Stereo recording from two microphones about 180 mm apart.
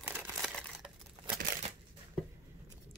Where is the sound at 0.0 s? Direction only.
10° right (ahead or behind).